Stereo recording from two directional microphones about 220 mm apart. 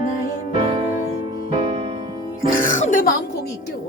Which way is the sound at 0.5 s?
25° right (ahead or behind).